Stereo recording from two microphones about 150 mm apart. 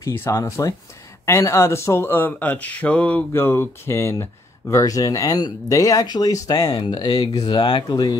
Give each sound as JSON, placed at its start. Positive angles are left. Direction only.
{"t": 0.0, "sound": "speech", "side_deg": 15}